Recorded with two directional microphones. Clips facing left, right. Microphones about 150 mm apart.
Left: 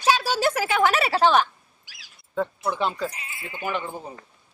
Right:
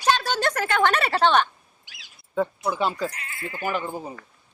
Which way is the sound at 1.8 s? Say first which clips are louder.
Right 2 dB; 20° right (ahead or behind).